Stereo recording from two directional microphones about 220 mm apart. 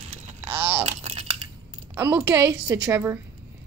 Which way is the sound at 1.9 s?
10° right (ahead or behind).